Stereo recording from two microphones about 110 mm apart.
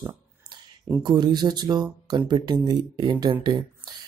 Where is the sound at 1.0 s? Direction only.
40° right (ahead or behind).